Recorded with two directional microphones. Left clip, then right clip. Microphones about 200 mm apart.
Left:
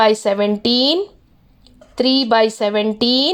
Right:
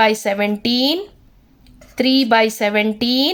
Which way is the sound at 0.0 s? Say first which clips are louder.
Left 2 dB; 20° left (ahead or behind).